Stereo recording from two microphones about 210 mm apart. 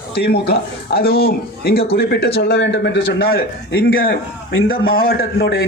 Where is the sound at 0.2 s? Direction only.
50° left (ahead or behind).